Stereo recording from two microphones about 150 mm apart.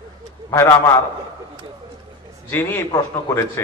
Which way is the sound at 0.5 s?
20° left (ahead or behind).